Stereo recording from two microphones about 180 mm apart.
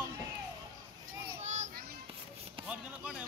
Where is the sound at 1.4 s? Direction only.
40° right (ahead or behind).